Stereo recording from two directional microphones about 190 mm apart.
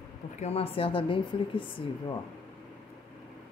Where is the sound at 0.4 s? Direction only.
30° left (ahead or behind).